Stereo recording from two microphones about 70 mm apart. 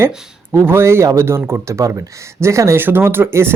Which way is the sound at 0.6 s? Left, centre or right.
Right.